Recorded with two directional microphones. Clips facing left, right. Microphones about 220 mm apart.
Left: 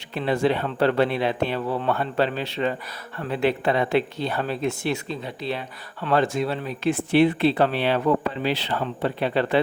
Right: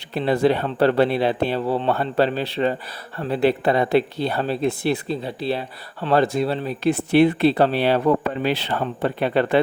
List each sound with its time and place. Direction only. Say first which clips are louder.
0.1 s speech: right 3 dB; 35° right (ahead or behind)
8.4 s speech: right 3 dB; 50° right (ahead or behind)